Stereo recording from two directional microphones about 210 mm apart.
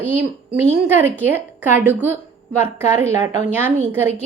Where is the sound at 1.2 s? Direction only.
10° right (ahead or behind).